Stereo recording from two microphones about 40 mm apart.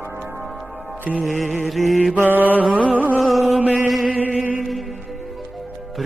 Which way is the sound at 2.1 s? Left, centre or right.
Right.